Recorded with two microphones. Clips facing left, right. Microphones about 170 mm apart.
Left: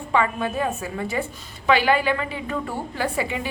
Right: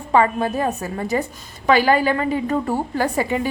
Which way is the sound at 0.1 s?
40° right (ahead or behind).